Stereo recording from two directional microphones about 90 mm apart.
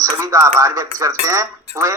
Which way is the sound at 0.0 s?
35° right (ahead or behind).